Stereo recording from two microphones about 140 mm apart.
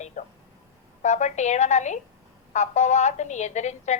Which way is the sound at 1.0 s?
55° left (ahead or behind).